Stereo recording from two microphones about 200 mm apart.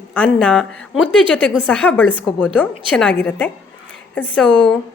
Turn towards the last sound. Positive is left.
turn(degrees=5)  # may be behind; listen again after turning